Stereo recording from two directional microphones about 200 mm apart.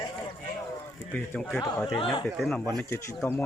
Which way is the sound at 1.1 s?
5° left (ahead or behind).